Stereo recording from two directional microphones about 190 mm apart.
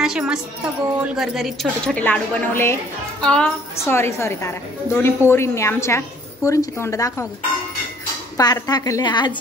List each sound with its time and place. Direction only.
0.0 s a woman's voice: 5° right (ahead or behind); by 7.2 s 15° left (ahead or behind)
8.4 s a woman's voice: 20° left (ahead or behind)